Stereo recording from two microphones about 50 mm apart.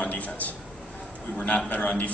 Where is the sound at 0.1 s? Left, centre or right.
Left.